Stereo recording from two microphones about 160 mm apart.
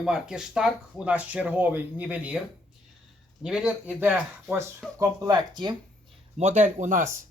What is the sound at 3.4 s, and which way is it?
Speech, 5° right (ahead or behind).